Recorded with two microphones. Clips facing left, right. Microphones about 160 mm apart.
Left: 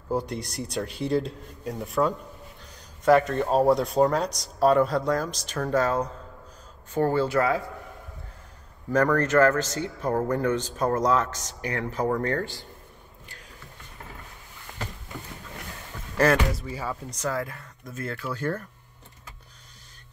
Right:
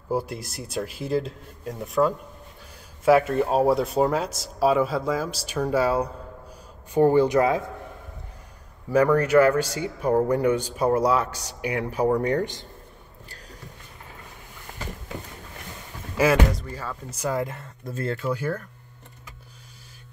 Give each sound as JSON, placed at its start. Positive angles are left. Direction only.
{"t": 0.1, "sound": "speech", "side_deg": -5}
{"t": 8.9, "sound": "speech", "side_deg": -10}
{"t": 16.2, "sound": "speech", "side_deg": -5}
{"t": 16.5, "sound": "speech", "side_deg": 10}
{"t": 17.1, "sound": "speech", "side_deg": -15}